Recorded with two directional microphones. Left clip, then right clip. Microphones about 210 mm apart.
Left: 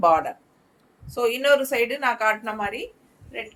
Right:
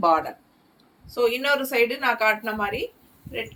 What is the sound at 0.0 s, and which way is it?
A woman's voice, 30° left (ahead or behind).